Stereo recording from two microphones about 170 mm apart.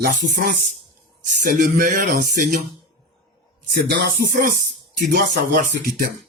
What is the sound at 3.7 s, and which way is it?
Music, 60° right (ahead or behind).